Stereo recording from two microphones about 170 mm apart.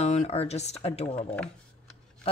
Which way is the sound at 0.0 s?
40° left (ahead or behind).